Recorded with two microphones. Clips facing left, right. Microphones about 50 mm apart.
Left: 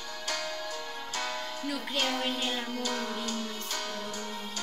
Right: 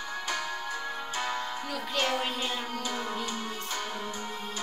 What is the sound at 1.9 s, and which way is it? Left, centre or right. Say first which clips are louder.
Music: right 2 dB; right.